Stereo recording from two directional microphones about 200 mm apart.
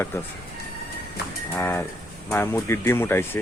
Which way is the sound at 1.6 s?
15° left (ahead or behind).